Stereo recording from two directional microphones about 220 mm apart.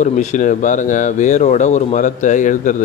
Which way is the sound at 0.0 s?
35° left (ahead or behind).